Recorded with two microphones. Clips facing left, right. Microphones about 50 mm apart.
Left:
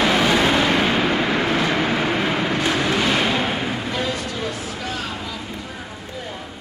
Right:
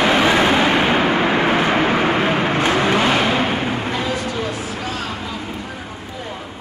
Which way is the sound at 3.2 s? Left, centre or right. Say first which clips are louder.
Right 3 dB; right.